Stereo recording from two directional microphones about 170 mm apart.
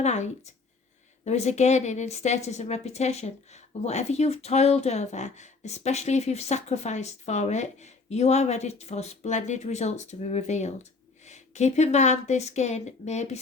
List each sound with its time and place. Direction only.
0.0 s a woman's voice: 40° left (ahead or behind)